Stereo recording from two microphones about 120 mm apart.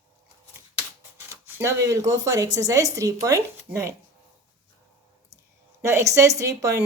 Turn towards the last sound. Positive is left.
turn(degrees=-25)  # may be behind; listen again after turning